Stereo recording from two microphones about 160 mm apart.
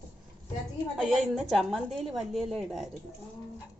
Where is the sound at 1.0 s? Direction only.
Centre (ahead or behind).